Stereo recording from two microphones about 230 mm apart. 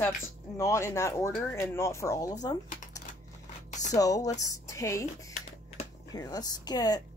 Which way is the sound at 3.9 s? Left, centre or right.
Centre.